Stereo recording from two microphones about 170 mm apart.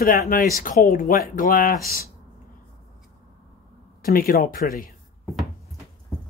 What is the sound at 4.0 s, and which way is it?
Speech, 60° left (ahead or behind).